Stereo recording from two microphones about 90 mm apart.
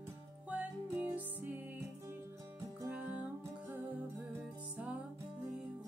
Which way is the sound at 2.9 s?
15° right (ahead or behind).